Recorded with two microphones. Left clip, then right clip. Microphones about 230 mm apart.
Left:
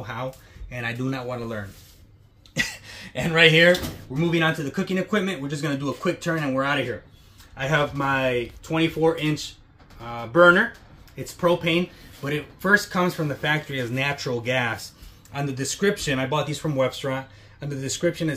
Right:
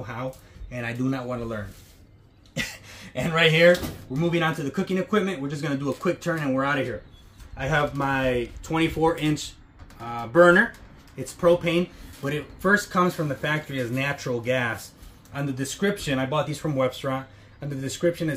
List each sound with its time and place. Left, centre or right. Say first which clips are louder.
0.0 s speech: left 1 dB; centre
11.1 s speech: right 2 dB; centre